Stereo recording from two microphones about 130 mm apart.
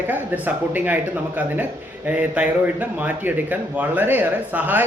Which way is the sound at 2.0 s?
10° right (ahead or behind).